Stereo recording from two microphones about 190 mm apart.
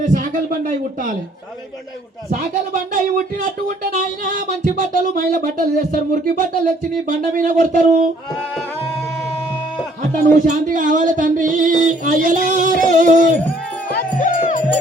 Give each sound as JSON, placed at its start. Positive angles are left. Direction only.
{"t": 0.0, "sound": "a sound", "side_deg": -45}
{"t": 2.3, "sound": "speech", "side_deg": -45}
{"t": 10.4, "sound": "speech", "side_deg": -45}
{"t": 13.8, "sound": "music", "side_deg": 45}